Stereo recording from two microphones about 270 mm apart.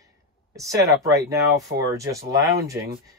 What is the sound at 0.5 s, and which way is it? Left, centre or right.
Speech, centre.